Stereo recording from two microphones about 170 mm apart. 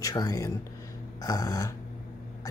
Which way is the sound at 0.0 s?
20° left (ahead or behind).